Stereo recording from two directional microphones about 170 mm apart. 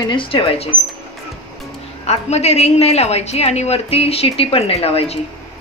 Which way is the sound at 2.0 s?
40° left (ahead or behind).